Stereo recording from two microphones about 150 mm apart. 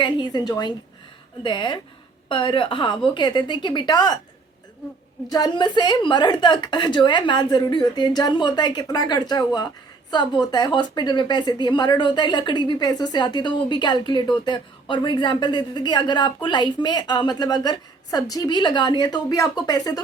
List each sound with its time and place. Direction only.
0.0 s a sound: 30° left (ahead or behind)
1.5 s a woman's voice: 30° left (ahead or behind)
5.3 s a woman's voice: 30° left (ahead or behind)